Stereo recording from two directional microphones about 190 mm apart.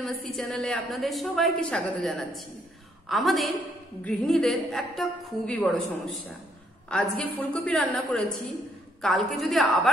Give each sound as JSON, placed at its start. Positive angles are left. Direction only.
{"t": 0.0, "sound": "a woman's voice", "side_deg": 0}